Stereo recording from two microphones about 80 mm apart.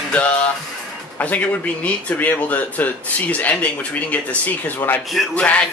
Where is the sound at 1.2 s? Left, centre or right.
Centre.